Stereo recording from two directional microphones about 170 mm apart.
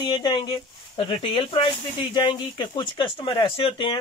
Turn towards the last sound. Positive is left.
turn(degrees=30)  # may be behind; listen again after turning